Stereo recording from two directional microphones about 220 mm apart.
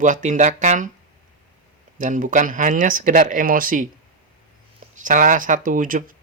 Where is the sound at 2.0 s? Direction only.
35° right (ahead or behind).